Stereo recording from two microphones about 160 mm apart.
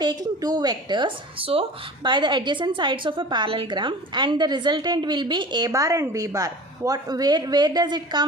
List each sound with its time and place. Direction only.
0.0 s a woman's voice: 25° right (ahead or behind)